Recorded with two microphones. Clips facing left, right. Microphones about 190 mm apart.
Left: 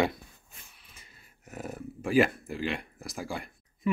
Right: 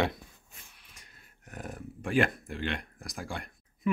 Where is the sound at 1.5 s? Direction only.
5° left (ahead or behind).